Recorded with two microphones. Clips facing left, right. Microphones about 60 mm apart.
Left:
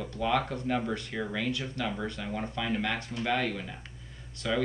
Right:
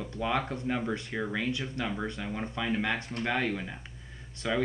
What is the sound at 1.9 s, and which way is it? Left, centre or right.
Speech, centre.